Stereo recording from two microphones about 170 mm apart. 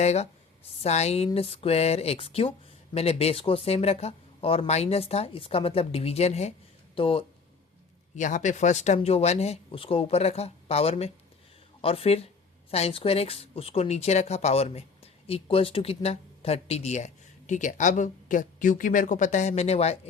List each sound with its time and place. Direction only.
0.0 s speech: 40° left (ahead or behind)
8.1 s speech: 45° left (ahead or behind)